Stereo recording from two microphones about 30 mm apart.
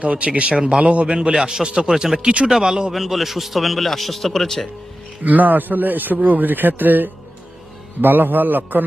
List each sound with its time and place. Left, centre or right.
0.0 s speech: right
0.5 s speech: right
0.8 s speech: right
1.0 s speech: right
1.4 s speech: centre
1.6 s speech: right
2.5 s speech: centre
2.9 s a man's voice: centre
5.2 s speech: right
8.1 s speech: right